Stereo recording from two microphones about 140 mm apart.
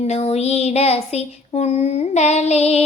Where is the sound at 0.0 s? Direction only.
50° left (ahead or behind).